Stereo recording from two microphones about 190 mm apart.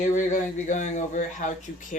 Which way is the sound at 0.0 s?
40° left (ahead or behind).